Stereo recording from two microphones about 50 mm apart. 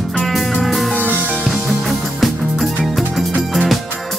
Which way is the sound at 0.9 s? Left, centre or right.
Right.